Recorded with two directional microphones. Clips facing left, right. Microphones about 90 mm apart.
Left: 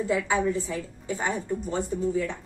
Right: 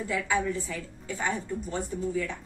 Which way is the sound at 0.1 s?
25° left (ahead or behind).